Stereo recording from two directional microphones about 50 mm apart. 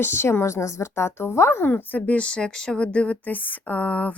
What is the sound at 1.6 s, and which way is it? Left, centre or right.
Speech, left.